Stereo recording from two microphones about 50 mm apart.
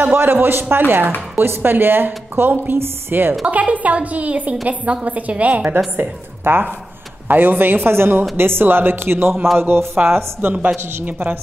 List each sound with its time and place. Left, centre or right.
0.0 s a woman's voice: right
3.4 s a woman's voice: right
5.9 s a woman's voice: right
11.1 s a woman's voice: right